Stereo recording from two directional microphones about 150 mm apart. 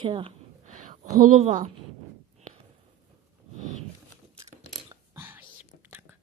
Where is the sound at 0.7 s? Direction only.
60° right (ahead or behind).